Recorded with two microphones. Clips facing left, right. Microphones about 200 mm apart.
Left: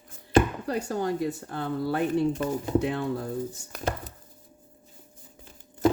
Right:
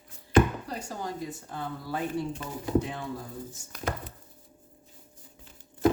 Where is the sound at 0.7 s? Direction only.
65° left (ahead or behind).